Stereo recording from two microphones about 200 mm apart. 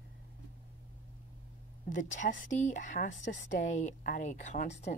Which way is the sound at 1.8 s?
40° left (ahead or behind).